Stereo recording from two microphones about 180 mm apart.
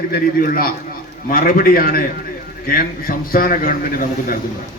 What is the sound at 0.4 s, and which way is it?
A man's voice, 55° left (ahead or behind).